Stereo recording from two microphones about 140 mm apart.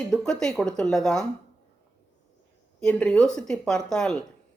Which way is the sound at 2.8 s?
5° left (ahead or behind).